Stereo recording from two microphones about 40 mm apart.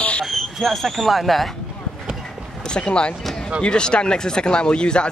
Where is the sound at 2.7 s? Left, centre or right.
Left.